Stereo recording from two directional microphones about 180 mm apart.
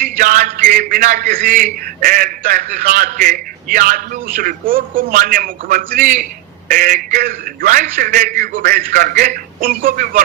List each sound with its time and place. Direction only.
0.2 s a man's voice: 50° right (ahead or behind)